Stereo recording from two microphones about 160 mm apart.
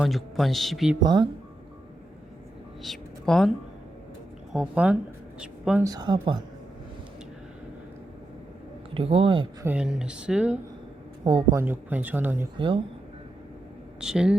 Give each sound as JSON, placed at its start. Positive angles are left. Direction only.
{"t": 0.0, "sound": "a man's voice", "side_deg": 0}
{"t": 1.0, "sound": "speech", "side_deg": -30}
{"t": 2.8, "sound": "speech", "side_deg": 0}
{"t": 4.5, "sound": "speech", "side_deg": -5}
{"t": 5.4, "sound": "a sound", "side_deg": -5}
{"t": 5.8, "sound": "speech", "side_deg": -25}
{"t": 9.0, "sound": "speech", "side_deg": -35}
{"t": 9.6, "sound": "a man's voice", "side_deg": -5}
{"t": 12.5, "sound": "speech", "side_deg": -30}
{"t": 14.0, "sound": "a man's voice", "side_deg": -5}